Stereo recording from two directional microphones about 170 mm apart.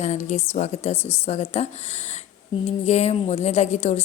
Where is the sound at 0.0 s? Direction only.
45° left (ahead or behind).